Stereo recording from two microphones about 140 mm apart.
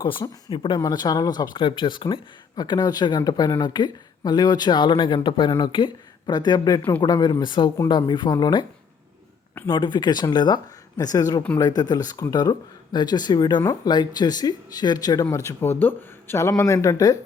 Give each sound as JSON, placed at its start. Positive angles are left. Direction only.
{"t": 0.0, "sound": "speech", "side_deg": 35}
{"t": 9.6, "sound": "speech", "side_deg": 35}